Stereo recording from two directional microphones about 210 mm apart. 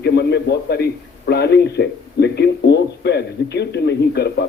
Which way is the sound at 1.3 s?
50° left (ahead or behind).